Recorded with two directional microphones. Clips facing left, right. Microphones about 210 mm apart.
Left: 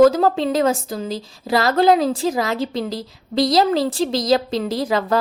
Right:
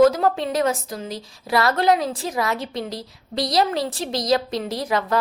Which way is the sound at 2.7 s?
90° left.